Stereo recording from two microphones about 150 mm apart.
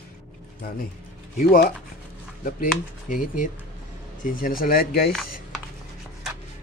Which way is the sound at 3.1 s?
65° left (ahead or behind).